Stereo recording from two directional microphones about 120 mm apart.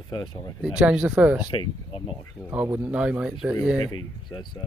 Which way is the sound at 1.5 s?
45° left (ahead or behind).